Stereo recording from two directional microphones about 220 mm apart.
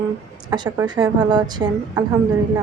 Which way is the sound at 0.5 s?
20° right (ahead or behind).